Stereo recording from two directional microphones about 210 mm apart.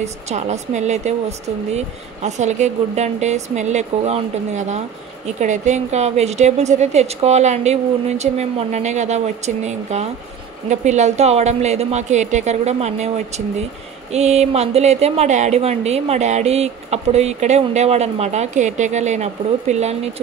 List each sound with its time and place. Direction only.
0.0 s a woman's voice: 35° right (ahead or behind)